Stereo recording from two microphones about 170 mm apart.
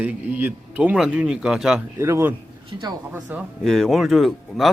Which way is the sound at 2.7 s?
25° right (ahead or behind).